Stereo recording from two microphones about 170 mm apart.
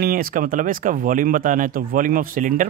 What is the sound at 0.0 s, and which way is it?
Speech, 60° right (ahead or behind).